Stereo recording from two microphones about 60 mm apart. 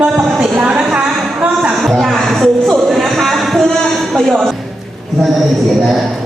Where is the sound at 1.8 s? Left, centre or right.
Centre.